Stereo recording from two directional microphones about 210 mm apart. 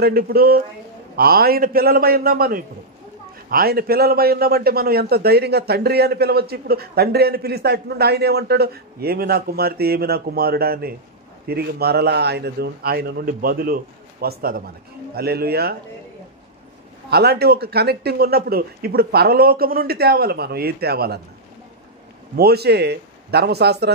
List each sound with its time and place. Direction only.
0.0 s a man's voice: 45° right (ahead or behind)
17.1 s a man's voice: 50° right (ahead or behind)
22.3 s a man's voice: 50° right (ahead or behind)